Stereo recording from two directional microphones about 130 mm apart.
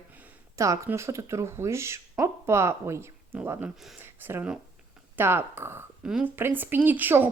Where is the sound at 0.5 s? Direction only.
25° right (ahead or behind).